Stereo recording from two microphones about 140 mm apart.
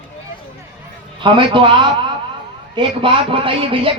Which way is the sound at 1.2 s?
35° right (ahead or behind).